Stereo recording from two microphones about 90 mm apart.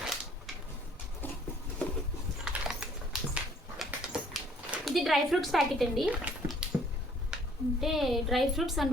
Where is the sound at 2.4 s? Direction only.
10° right (ahead or behind).